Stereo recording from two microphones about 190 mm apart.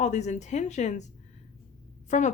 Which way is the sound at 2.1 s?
40° left (ahead or behind).